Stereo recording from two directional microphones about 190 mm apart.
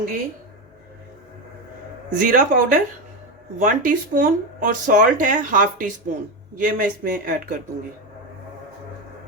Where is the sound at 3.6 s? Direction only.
45° right (ahead or behind).